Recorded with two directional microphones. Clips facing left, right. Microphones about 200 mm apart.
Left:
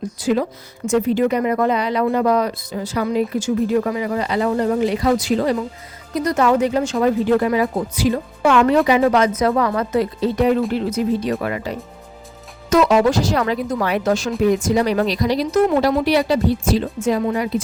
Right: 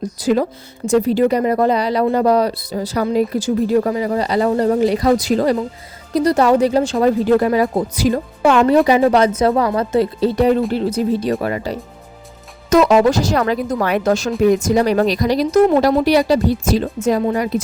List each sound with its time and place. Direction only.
0.0 s speech: 40° right (ahead or behind)
12.7 s speech: 45° right (ahead or behind)